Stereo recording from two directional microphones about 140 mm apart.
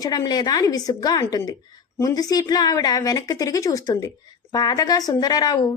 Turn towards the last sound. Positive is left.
turn(degrees=30)  # may be behind; listen again after turning